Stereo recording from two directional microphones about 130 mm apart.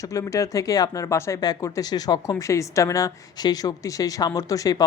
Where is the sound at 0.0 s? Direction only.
25° left (ahead or behind).